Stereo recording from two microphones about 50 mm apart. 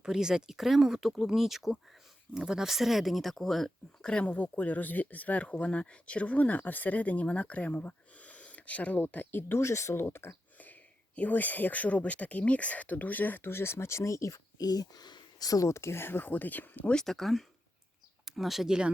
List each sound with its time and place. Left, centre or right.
0.0 s speech: centre
4.0 s speech: centre
4.3 s speech: left
9.0 s speech: left
9.6 s speech: left
9.9 s speech: left
10.6 s speech: left
15.6 s speech: left
16.8 s speech: centre